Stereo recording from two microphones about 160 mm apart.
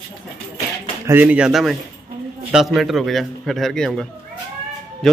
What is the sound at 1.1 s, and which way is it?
A man's voice, 10° right (ahead or behind).